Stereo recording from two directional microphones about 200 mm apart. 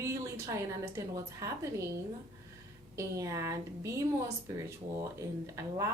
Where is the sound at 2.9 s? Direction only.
15° right (ahead or behind).